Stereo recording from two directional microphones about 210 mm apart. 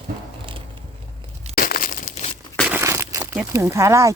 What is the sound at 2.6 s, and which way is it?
Crumpling, 5° right (ahead or behind).